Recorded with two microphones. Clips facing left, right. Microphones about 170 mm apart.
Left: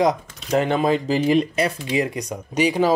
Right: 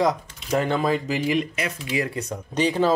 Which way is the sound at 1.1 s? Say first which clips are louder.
Left 5 dB; 35° left (ahead or behind).